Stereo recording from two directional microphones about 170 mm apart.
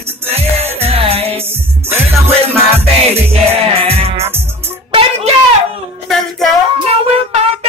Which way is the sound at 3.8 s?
35° right (ahead or behind).